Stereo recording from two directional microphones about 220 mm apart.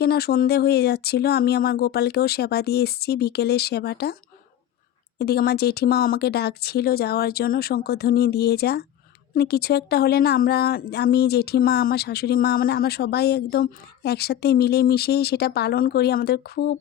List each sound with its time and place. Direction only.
0.0 s speech: 45° left (ahead or behind)
5.2 s speech: 45° left (ahead or behind)